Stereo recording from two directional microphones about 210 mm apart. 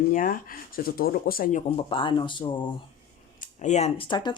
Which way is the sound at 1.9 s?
25° left (ahead or behind).